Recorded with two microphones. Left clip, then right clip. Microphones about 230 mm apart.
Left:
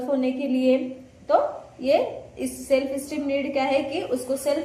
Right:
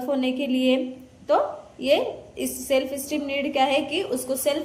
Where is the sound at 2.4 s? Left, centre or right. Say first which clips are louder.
Left 1 dB; right.